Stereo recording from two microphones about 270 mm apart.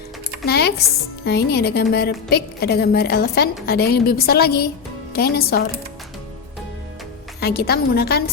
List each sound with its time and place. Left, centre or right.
0.4 s a woman's voice: left
7.3 s a woman's voice: left